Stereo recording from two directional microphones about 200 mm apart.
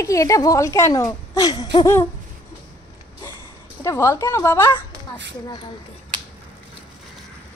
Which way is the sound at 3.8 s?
15° left (ahead or behind).